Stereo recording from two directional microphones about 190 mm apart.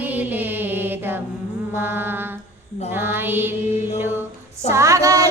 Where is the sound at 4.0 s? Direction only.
10° right (ahead or behind).